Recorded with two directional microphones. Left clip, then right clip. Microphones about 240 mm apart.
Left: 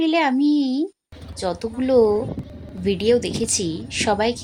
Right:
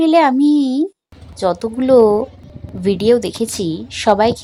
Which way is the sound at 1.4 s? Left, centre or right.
Right.